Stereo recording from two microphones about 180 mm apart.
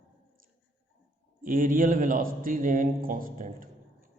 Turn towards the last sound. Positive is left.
turn(degrees=-50)  # may be behind; listen again after turning